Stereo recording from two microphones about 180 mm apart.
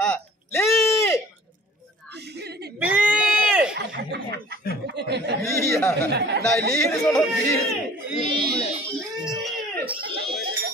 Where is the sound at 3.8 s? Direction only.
70° right (ahead or behind).